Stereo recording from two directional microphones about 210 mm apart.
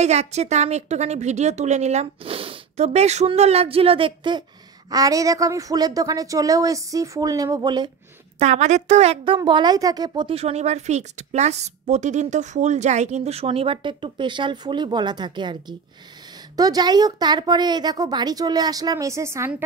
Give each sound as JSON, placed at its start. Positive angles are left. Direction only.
{"t": 0.0, "sound": "a woman's voice", "side_deg": -30}
{"t": 8.4, "sound": "a woman's voice", "side_deg": -35}
{"t": 16.5, "sound": "a woman's voice", "side_deg": -20}